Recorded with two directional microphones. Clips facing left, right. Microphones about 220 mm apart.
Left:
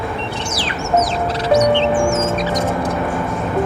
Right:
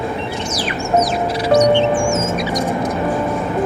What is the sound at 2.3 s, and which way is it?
Mouse, 10° right (ahead or behind).